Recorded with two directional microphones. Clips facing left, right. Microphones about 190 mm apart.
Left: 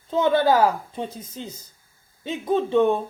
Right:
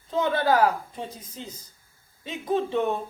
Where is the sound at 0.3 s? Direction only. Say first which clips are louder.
Left 4 dB; 30° left (ahead or behind).